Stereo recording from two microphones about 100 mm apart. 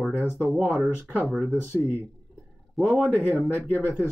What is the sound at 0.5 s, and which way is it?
Speech, centre (ahead or behind).